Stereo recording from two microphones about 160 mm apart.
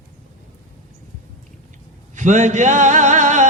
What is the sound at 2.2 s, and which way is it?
Music, 50° right (ahead or behind).